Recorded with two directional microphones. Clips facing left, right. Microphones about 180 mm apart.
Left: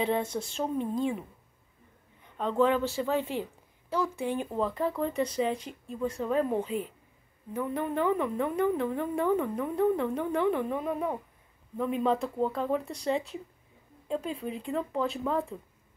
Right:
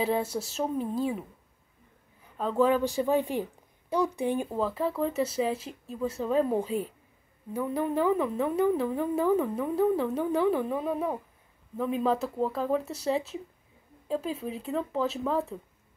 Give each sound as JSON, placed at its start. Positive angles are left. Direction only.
{"t": 0.0, "sound": "a woman's voice", "side_deg": -5}
{"t": 2.2, "sound": "a woman's voice", "side_deg": -5}
{"t": 4.5, "sound": "speech", "side_deg": 0}
{"t": 7.5, "sound": "speech", "side_deg": -5}